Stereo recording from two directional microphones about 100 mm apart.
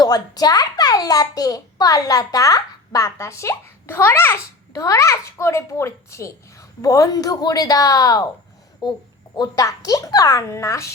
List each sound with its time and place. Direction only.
0.0 s a child's voice: 40° left (ahead or behind)